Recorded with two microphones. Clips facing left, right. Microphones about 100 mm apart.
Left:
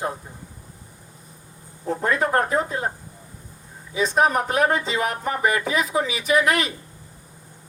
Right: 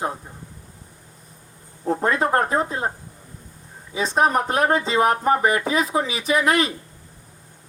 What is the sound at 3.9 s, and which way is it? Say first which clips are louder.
Speech: even; 30° right (ahead or behind).